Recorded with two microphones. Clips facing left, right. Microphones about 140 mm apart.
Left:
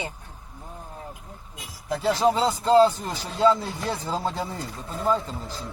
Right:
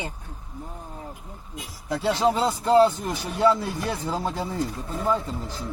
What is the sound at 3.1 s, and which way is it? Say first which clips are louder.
Speech: right 3 dB; 15° right (ahead or behind).